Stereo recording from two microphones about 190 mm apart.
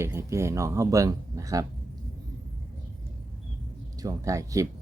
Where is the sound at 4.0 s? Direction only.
15° right (ahead or behind).